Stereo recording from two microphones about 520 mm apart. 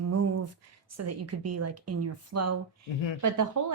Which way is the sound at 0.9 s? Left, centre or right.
Right.